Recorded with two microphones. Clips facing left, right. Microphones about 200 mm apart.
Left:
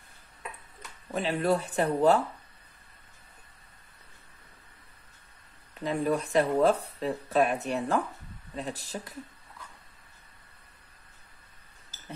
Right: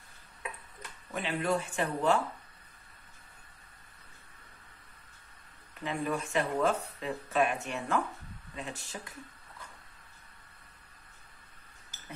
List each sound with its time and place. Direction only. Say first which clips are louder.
1.1 s speech: left 4 dB; 35° left (ahead or behind)
5.9 s speech: left 5 dB; 35° left (ahead or behind)